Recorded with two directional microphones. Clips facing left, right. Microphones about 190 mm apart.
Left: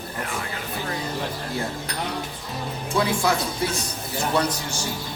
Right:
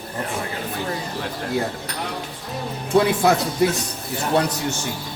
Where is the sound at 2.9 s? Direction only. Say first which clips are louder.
Right 7 dB; 55° right (ahead or behind).